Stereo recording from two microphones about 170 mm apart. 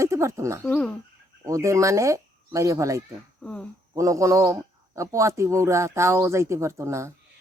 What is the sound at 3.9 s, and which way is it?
Speech, 20° right (ahead or behind).